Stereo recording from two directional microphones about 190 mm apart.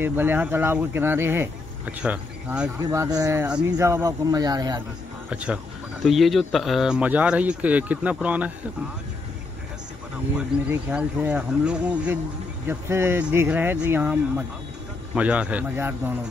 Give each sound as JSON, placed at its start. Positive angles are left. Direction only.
{"t": 0.0, "sound": "speech", "side_deg": -10}
{"t": 2.8, "sound": "speech", "side_deg": -20}
{"t": 5.3, "sound": "speech", "side_deg": -5}
{"t": 10.3, "sound": "speech", "side_deg": -5}